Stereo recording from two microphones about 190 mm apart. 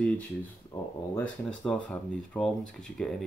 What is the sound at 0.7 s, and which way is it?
Speech, 15° left (ahead or behind).